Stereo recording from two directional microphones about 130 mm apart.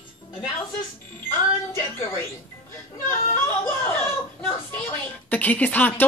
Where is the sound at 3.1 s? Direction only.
20° left (ahead or behind).